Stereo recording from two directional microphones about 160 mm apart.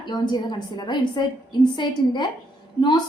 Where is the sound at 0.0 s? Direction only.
30° left (ahead or behind).